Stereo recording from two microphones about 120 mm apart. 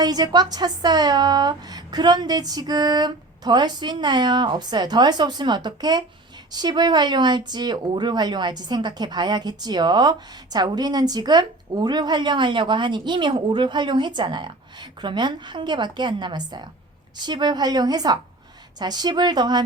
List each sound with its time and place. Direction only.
0.0 s speech: 35° right (ahead or behind)